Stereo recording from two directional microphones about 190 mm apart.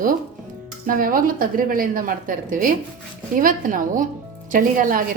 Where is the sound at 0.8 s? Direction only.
50° right (ahead or behind).